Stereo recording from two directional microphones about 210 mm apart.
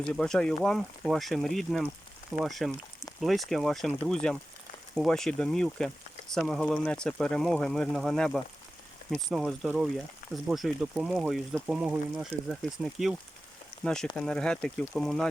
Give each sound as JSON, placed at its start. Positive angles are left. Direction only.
{"t": 0.0, "sound": "speech", "side_deg": 5}